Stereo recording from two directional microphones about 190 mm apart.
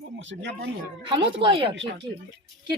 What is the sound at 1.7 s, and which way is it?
Speech, 75° right (ahead or behind).